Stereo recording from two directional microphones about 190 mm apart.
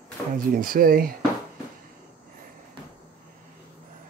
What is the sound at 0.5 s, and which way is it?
Speech, 50° right (ahead or behind).